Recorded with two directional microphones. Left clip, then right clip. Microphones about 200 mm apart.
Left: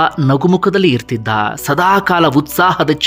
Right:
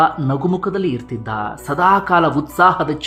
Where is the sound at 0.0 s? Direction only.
20° left (ahead or behind).